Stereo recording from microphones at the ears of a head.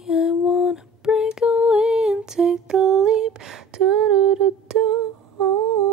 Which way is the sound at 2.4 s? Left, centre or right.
Right.